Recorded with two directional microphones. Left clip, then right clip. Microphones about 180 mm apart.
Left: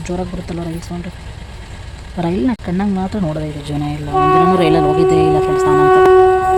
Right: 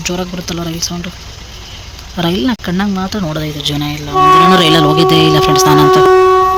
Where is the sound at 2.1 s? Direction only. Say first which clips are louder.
Right 3 dB; 5° left (ahead or behind).